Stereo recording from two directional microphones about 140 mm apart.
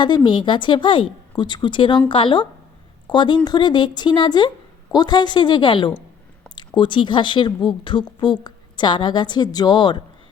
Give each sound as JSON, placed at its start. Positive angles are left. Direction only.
{"t": 0.0, "sound": "speech", "side_deg": 35}